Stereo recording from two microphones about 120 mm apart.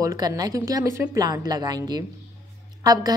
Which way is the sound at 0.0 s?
30° right (ahead or behind).